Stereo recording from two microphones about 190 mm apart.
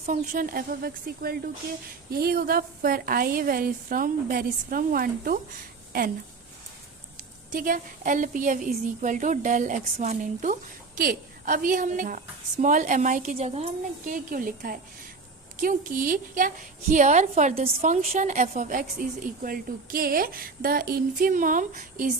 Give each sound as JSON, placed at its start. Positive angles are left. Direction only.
{"t": 0.0, "sound": "a woman's voice", "side_deg": -45}
{"t": 7.5, "sound": "a woman's voice", "side_deg": -45}
{"t": 14.1, "sound": "a woman's voice", "side_deg": -45}